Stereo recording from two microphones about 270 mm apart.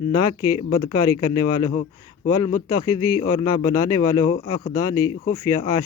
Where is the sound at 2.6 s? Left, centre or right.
Centre.